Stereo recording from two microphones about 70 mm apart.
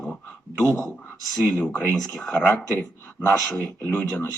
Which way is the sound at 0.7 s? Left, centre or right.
Left.